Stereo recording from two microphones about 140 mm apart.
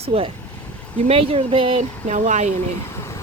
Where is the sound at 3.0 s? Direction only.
20° left (ahead or behind).